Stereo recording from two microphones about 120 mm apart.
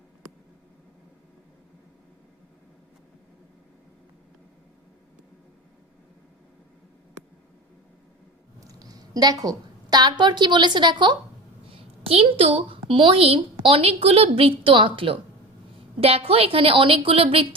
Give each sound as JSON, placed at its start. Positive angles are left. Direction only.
{"t": 8.6, "sound": "a woman's voice", "side_deg": -30}
{"t": 11.7, "sound": "a woman's voice", "side_deg": -50}